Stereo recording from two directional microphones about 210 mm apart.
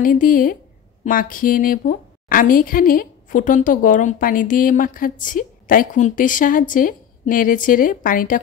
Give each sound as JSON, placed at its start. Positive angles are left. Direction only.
{"t": 0.0, "sound": "a woman's voice", "side_deg": 40}